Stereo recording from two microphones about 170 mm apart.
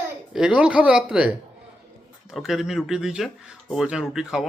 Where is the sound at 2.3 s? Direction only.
Centre (ahead or behind).